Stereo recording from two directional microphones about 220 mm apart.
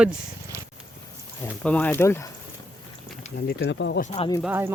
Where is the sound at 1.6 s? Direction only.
5° left (ahead or behind).